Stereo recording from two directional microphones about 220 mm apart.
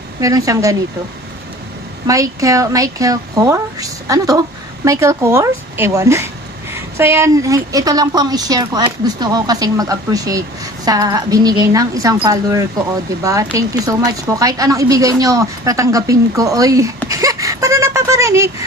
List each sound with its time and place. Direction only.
0.2 s a woman's voice: 15° right (ahead or behind)
2.0 s a woman's voice: 15° right (ahead or behind)
17.1 s a sound: 15° right (ahead or behind)